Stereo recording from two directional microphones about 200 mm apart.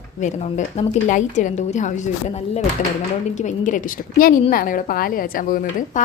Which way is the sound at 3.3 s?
40° left (ahead or behind).